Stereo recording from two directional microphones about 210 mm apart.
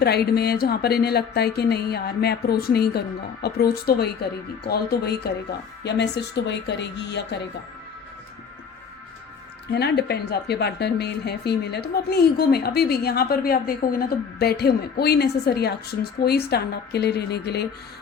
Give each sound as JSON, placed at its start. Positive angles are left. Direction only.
{"t": 0.0, "sound": "a woman's voice", "side_deg": 50}
{"t": 9.7, "sound": "a woman's voice", "side_deg": 50}